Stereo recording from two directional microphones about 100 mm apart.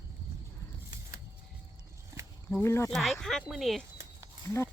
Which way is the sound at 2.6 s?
25° left (ahead or behind).